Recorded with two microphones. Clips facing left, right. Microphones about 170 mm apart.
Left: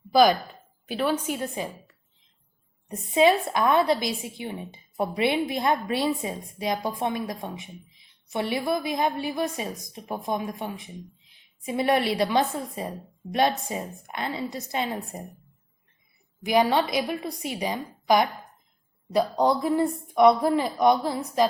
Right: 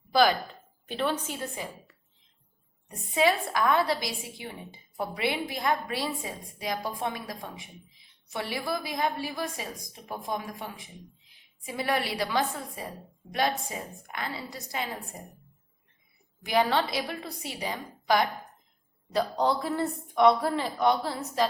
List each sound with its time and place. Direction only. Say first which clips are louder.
0.1 s speech: left 4 dB; 15° left (ahead or behind)
3.2 s a woman's voice: left 5 dB; 20° left (ahead or behind)
16.4 s speech: left 4 dB; 15° left (ahead or behind)